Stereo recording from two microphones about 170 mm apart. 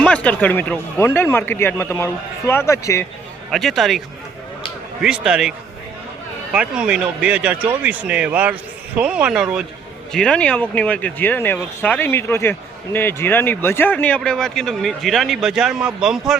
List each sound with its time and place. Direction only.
0.0 s speech: 5° left (ahead or behind)
3.5 s speech: centre (ahead or behind)
5.0 s speech: 5° right (ahead or behind)